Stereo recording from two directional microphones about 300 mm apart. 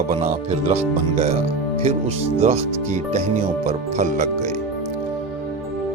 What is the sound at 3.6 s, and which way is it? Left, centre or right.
Speech, right.